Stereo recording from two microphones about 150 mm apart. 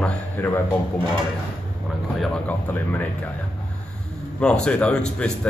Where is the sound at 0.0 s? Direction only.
15° left (ahead or behind).